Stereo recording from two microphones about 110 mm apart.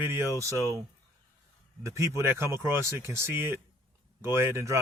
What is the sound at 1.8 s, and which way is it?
Speech, 25° right (ahead or behind).